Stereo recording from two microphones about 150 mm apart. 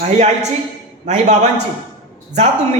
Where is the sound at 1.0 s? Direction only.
50° right (ahead or behind).